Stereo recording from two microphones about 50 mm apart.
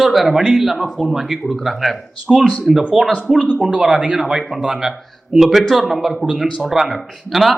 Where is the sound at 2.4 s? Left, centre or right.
Left.